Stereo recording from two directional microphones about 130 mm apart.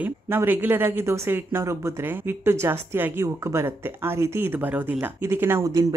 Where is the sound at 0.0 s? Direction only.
15° right (ahead or behind).